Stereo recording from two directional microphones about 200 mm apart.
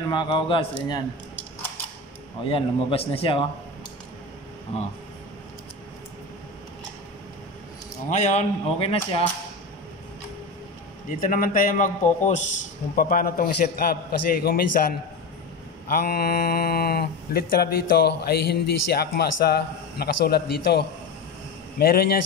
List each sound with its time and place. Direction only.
0.1 s a man's voice: 25° left (ahead or behind)
2.4 s a man's voice: 30° left (ahead or behind)
4.7 s speech: 30° left (ahead or behind)
8.1 s speech: 35° left (ahead or behind)
11.1 s speech: 40° left (ahead or behind)
12.9 s speech: 45° left (ahead or behind)